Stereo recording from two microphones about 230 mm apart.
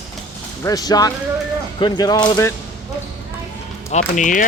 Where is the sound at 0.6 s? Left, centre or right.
Centre.